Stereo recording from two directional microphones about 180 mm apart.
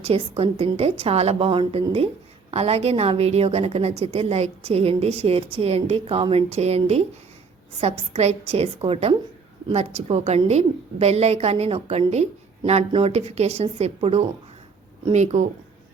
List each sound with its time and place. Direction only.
0.0 s a woman's voice: 35° right (ahead or behind)